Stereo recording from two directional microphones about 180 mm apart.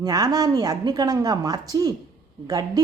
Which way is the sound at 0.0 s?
20° right (ahead or behind).